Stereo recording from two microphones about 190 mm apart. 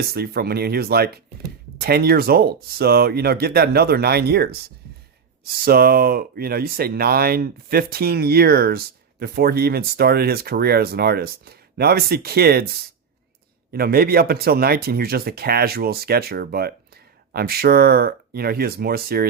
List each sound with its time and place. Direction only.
0.0 s speech: 55° right (ahead or behind)
5.6 s speech: 55° right (ahead or behind)
13.7 s speech: 55° right (ahead or behind)